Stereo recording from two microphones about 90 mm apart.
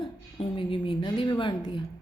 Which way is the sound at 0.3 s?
75° left (ahead or behind).